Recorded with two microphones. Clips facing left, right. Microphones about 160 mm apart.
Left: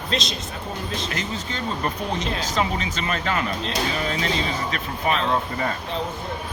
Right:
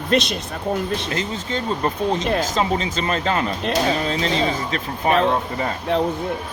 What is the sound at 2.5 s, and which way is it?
Speech, 30° right (ahead or behind).